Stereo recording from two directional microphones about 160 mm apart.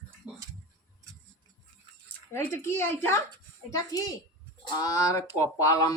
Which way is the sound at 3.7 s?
25° left (ahead or behind).